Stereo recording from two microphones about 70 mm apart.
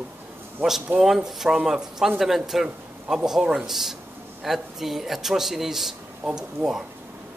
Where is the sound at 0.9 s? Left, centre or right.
Right.